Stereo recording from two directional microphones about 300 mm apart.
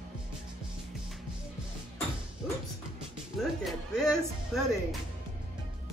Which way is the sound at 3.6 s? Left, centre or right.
Centre.